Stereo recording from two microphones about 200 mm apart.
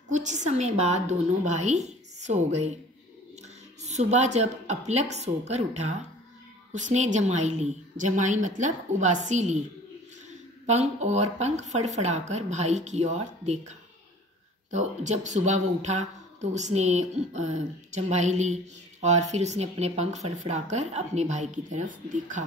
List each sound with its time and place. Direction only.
0.1 s speech: 35° right (ahead or behind)
3.8 s speech: 35° right (ahead or behind)
10.7 s speech: 35° right (ahead or behind)